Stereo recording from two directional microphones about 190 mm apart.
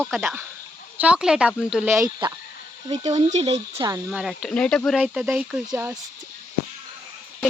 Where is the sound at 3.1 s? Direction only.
35° right (ahead or behind).